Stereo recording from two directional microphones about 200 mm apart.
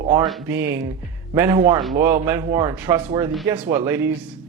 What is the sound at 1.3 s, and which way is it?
A man's voice, 15° right (ahead or behind).